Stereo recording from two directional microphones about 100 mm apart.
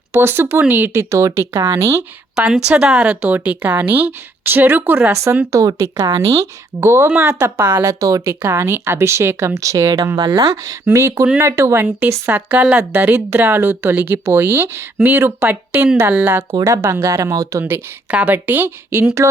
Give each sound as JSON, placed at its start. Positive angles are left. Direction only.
{"t": 0.1, "sound": "speech", "side_deg": -25}
{"t": 2.3, "sound": "a woman's voice", "side_deg": -10}
{"t": 10.2, "sound": "speech", "side_deg": -50}
{"t": 10.8, "sound": "speech", "side_deg": -25}
{"t": 16.6, "sound": "speech", "side_deg": -35}
{"t": 17.6, "sound": "speech", "side_deg": -15}